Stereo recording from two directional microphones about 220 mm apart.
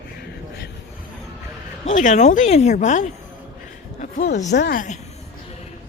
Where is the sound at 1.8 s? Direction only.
35° left (ahead or behind).